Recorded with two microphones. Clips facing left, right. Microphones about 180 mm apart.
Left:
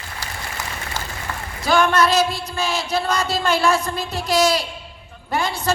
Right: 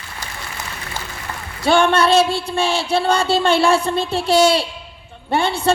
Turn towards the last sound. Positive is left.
turn(degrees=-30)  # may be behind; listen again after turning